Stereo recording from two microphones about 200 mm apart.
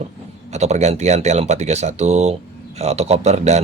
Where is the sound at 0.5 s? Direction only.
35° right (ahead or behind).